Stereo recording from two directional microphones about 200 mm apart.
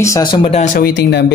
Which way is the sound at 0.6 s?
40° left (ahead or behind).